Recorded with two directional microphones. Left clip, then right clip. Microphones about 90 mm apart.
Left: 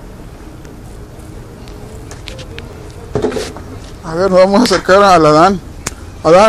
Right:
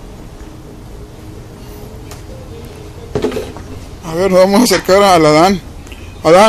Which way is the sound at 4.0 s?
25° right (ahead or behind).